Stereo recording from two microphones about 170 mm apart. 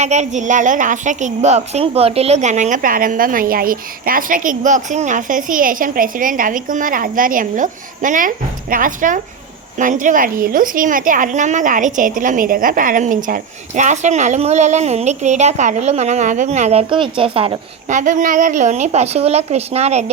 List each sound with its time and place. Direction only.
0.0 s a woman's voice: 45° right (ahead or behind)
17.8 s a woman's voice: 45° right (ahead or behind)